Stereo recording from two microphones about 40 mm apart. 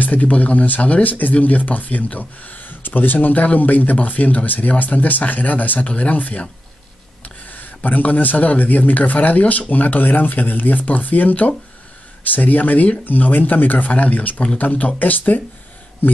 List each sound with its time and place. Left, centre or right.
0.0 s speech: left
7.4 s speech: left